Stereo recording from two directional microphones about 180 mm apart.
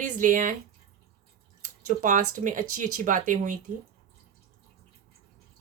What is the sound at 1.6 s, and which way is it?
Speech, 45° right (ahead or behind).